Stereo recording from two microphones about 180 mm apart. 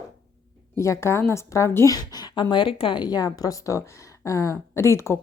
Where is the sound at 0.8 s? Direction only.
15° left (ahead or behind).